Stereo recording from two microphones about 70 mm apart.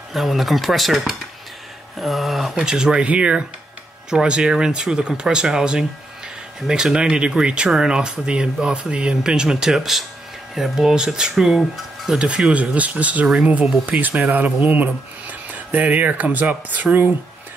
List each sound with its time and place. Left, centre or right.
0.1 s speech: centre; by 17.1 s right